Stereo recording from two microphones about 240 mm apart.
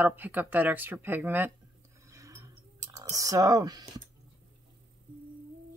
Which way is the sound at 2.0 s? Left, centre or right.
Centre.